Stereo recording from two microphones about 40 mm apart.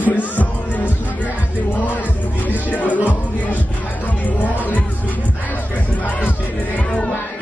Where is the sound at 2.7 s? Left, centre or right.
Left.